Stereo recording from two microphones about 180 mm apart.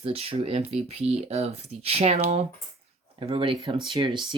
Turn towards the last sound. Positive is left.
turn(degrees=-25)  # may be behind; listen again after turning